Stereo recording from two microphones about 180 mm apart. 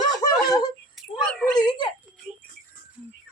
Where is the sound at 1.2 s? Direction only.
5° left (ahead or behind).